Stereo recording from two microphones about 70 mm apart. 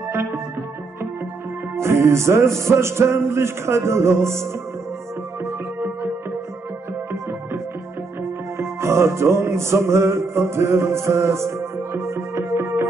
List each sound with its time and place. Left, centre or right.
0.1 s music: right
1.8 s music: right
8.5 s music: right